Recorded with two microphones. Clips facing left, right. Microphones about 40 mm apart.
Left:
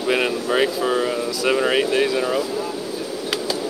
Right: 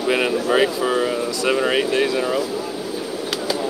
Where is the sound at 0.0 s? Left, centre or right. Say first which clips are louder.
Right 1 dB; centre.